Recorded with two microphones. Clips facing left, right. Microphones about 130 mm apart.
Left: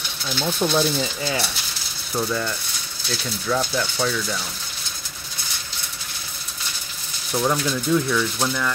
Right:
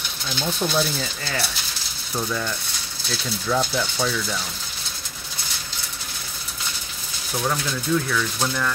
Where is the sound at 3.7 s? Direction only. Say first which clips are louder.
Left 1 dB; 5° right (ahead or behind).